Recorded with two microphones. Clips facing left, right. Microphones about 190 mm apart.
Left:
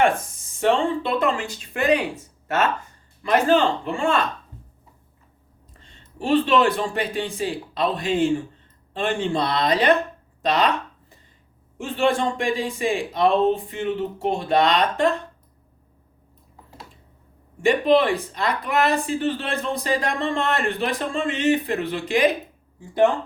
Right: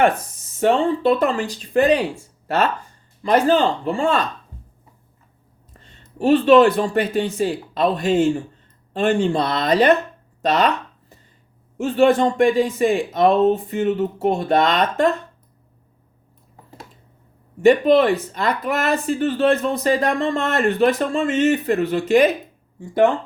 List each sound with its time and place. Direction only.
0.6 s speech: 40° right (ahead or behind)
3.2 s speech: 35° right (ahead or behind)
6.1 s speech: 45° right (ahead or behind)
11.8 s speech: 40° right (ahead or behind)
17.6 s speech: 40° right (ahead or behind)